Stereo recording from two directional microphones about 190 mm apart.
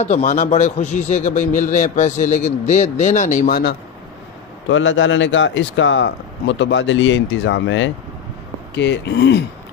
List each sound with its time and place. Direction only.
0.0 s a man's voice: 40° left (ahead or behind)
4.6 s a man's voice: 80° left; by 9.4 s 65° left (ahead or behind)